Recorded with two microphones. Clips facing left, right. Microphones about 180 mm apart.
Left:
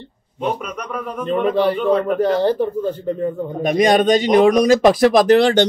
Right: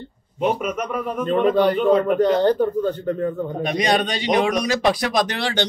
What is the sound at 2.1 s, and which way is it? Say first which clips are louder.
Speech: even; 10° left (ahead or behind).